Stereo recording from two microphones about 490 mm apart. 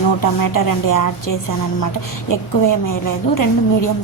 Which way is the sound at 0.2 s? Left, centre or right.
Left.